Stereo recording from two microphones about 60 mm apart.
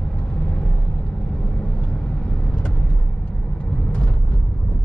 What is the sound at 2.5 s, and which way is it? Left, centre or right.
Vehicle, left.